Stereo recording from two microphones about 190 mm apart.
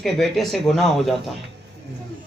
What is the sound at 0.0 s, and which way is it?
A man's voice, centre (ahead or behind).